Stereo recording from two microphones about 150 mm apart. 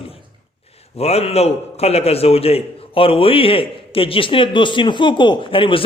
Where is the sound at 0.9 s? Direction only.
40° left (ahead or behind).